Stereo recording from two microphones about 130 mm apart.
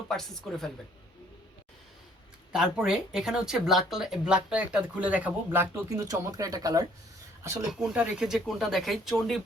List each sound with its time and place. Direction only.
0.1 s speech: centre (ahead or behind)
2.5 s speech: 5° right (ahead or behind); by 7.7 s 25° right (ahead or behind)
7.7 s speech: 5° right (ahead or behind)